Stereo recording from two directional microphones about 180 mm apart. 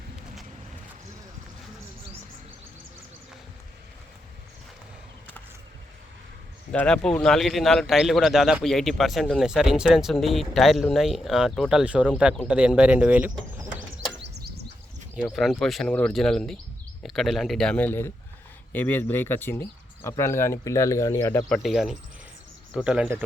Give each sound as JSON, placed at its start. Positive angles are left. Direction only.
{"t": 6.7, "sound": "a man's voice", "side_deg": 5}
{"t": 14.2, "sound": "a sound", "side_deg": -65}
{"t": 15.1, "sound": "a man's voice", "side_deg": 0}
{"t": 21.5, "sound": "a man's voice", "side_deg": 0}